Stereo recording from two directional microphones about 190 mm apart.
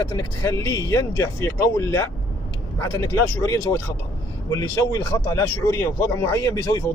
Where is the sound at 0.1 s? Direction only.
20° left (ahead or behind).